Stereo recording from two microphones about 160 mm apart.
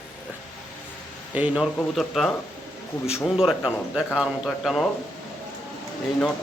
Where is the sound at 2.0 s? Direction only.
Centre (ahead or behind).